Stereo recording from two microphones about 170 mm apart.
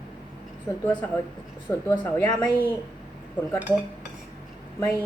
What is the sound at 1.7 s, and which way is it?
A woman's voice, 15° left (ahead or behind).